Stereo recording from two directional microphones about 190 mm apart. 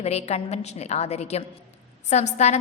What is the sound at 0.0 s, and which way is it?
A woman's voice, 35° left (ahead or behind).